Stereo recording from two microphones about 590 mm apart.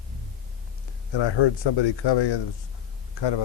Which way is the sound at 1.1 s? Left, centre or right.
Left.